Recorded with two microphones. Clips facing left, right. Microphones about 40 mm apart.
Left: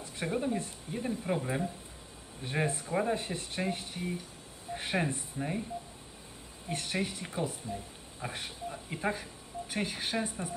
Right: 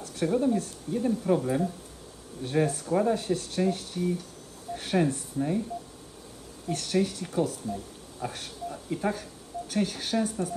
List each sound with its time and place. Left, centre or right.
0.0 s speech: left
6.7 s speech: left